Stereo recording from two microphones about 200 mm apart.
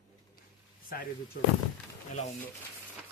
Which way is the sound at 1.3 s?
60° left (ahead or behind).